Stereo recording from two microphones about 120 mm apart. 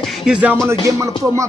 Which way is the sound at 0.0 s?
5° right (ahead or behind).